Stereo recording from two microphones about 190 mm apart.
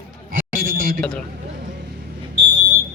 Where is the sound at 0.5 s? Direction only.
50° right (ahead or behind).